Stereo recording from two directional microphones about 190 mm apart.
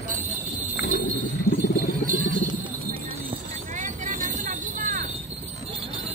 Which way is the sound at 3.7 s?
40° right (ahead or behind).